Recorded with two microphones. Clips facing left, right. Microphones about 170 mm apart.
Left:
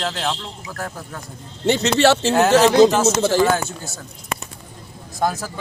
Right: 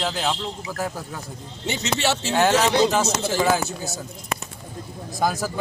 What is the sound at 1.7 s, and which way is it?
Speech, 75° left (ahead or behind).